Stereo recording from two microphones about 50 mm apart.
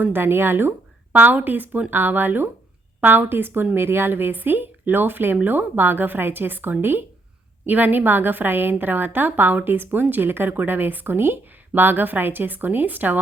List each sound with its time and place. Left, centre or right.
0.0 s a woman's voice: right
1.1 s a woman's voice: right